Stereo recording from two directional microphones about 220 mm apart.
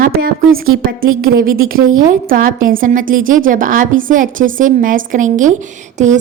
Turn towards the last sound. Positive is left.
turn(degrees=-30)  # may be behind; listen again after turning